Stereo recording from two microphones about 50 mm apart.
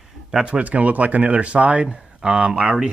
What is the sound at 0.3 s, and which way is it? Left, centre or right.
Speech, centre.